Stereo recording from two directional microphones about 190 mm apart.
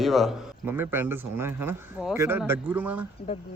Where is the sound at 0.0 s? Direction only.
Centre (ahead or behind).